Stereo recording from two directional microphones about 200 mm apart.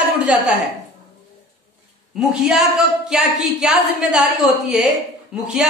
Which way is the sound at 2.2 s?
5° right (ahead or behind).